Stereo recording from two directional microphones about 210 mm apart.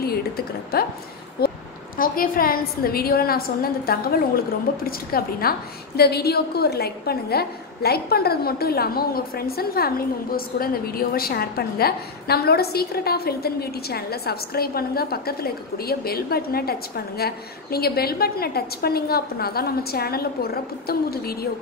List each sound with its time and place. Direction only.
0.7 s a woman's voice: 45° left (ahead or behind)